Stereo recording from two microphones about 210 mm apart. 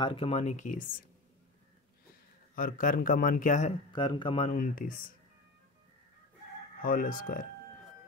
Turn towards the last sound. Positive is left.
turn(degrees=40)  # may be behind; listen again after turning